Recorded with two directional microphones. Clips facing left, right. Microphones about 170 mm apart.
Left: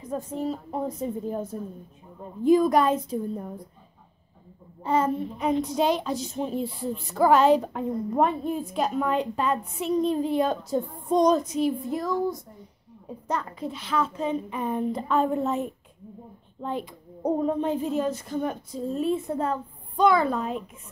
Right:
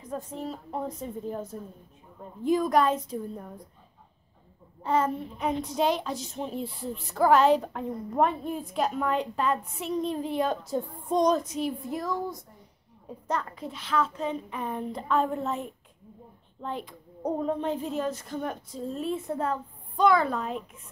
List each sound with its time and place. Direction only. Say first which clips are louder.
0.1 s a woman's voice: left 5 dB; 5° left (ahead or behind)
2.4 s a woman's voice: left 4 dB; 5° left (ahead or behind)
4.8 s a woman's voice: left 2 dB; 5° left (ahead or behind)
16.6 s a woman's voice: left 4 dB; 10° left (ahead or behind)